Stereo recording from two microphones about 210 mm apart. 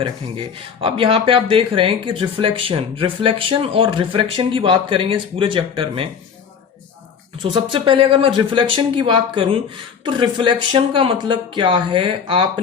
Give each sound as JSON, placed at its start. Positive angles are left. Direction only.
{"t": 0.0, "sound": "speech", "side_deg": -25}
{"t": 7.5, "sound": "speech", "side_deg": -25}